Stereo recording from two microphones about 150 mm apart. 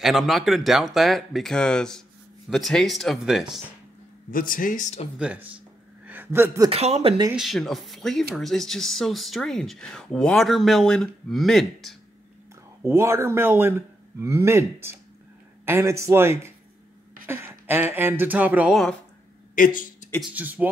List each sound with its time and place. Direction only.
0.0 s speech: centre (ahead or behind)
4.3 s speech: 65° left (ahead or behind)
5.2 s a man's voice: 10° right (ahead or behind)
6.7 s speech: 45° right (ahead or behind)
7.3 s speech: centre (ahead or behind)
12.8 s a man's voice: 20° right (ahead or behind)
19.5 s speech: 65° left (ahead or behind)
20.2 s a man's voice: 10° right (ahead or behind)